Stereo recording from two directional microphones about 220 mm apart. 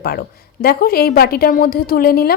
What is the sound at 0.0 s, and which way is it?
A woman's voice, 45° left (ahead or behind).